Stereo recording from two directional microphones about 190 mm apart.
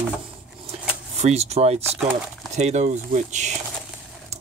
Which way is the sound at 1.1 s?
35° right (ahead or behind).